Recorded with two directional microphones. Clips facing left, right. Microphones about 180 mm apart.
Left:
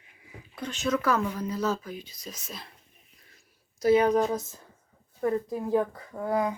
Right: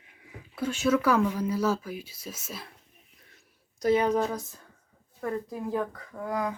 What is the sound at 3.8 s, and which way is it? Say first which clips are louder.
A woman's voice: left 2 dB; 10° left (ahead or behind).